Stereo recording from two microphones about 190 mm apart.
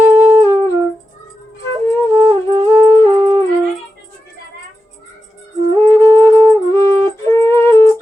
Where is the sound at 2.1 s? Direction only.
20° right (ahead or behind).